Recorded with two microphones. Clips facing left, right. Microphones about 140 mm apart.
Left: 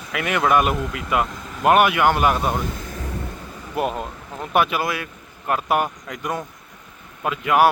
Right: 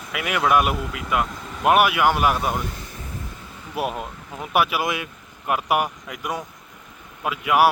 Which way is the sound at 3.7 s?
5° right (ahead or behind).